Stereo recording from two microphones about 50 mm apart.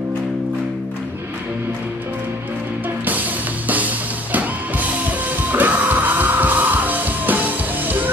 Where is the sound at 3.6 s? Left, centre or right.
Right.